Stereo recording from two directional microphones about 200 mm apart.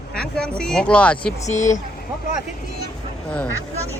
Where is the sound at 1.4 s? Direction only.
35° left (ahead or behind).